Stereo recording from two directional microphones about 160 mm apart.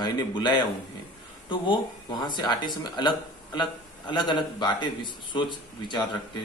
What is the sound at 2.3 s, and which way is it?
A man's voice, 30° left (ahead or behind).